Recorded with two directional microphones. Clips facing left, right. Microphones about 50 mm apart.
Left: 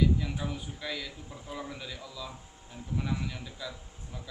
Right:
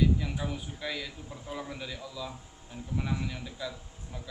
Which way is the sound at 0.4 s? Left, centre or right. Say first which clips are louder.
Right 1 dB; centre.